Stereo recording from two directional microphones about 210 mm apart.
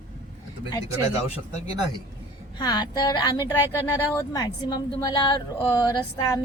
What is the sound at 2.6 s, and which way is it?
A woman's voice, 20° left (ahead or behind).